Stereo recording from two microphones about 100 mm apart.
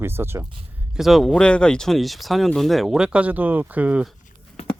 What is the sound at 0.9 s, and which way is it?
Speech, centre (ahead or behind).